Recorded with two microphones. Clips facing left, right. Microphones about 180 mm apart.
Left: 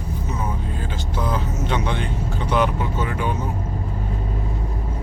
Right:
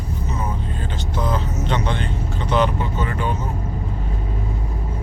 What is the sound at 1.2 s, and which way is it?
Vehicle, 5° left (ahead or behind).